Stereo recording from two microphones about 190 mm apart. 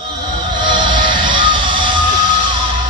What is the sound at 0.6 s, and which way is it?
Music, 25° right (ahead or behind).